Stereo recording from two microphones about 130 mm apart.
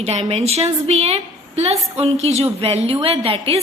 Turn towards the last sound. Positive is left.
turn(degrees=-50)  # may be behind; listen again after turning